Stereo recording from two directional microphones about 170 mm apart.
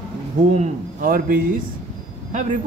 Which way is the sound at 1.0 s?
55° right (ahead or behind).